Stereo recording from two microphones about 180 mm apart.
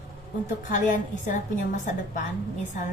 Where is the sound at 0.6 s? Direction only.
45° left (ahead or behind).